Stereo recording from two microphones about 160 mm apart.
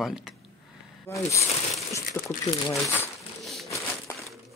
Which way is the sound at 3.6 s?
20° left (ahead or behind).